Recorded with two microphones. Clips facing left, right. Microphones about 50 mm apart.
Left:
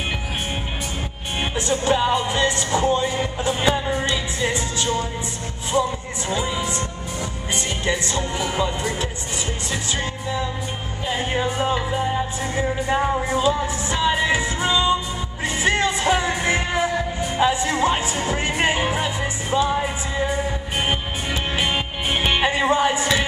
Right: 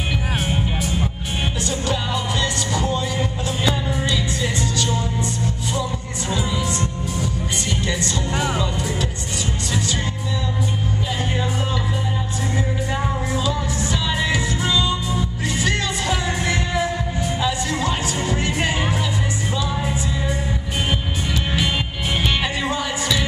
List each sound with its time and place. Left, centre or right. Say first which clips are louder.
1.7 s music: left 8 dB; left
11.1 s music: left 6 dB; left
13.4 s music: left 3 dB; left
19.8 s music: left 1 dB; centre
21.5 s music: even; left